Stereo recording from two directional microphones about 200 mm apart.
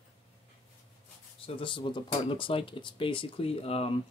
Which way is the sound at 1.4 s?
25° left (ahead or behind).